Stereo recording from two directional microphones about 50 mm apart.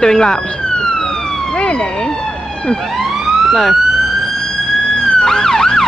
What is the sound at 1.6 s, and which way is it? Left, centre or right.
Speech, left.